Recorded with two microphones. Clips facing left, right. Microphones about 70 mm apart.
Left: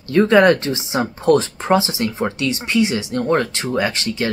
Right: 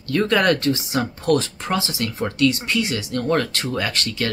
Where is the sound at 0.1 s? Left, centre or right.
Left.